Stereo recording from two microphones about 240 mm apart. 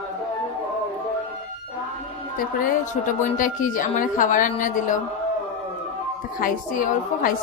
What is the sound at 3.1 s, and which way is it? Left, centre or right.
A woman's voice, left.